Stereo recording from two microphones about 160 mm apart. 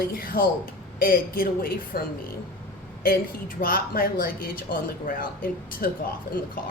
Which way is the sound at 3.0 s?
65° left (ahead or behind).